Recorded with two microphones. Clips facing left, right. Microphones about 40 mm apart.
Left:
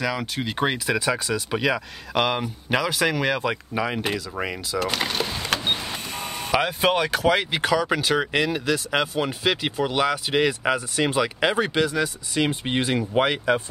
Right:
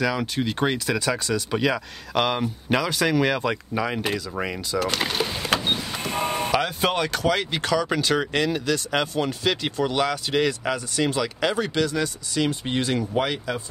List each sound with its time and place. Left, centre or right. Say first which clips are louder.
0.0 s speech: right 2 dB; centre
4.9 s vehicle: even; centre
6.0 s vehicle: right 6 dB; right
6.5 s speech: left 5 dB; centre; by 13.6 s left